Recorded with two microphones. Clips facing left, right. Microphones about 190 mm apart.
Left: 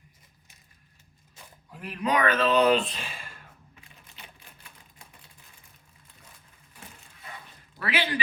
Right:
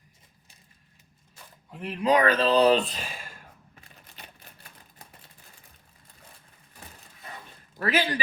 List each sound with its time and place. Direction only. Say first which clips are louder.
1.7 s speech: right 4 dB; 25° right (ahead or behind)
7.8 s speech: right 3 dB; 40° right (ahead or behind)